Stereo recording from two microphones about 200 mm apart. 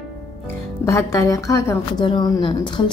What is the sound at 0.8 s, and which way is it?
A woman's voice, 15° left (ahead or behind).